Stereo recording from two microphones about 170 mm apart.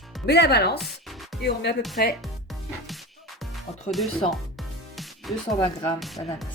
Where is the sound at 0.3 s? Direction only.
70° left (ahead or behind).